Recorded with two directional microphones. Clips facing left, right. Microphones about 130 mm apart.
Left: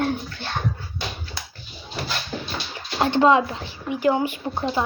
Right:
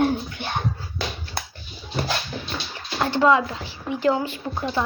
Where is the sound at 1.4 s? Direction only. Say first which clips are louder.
Right 5 dB; 55° right (ahead or behind).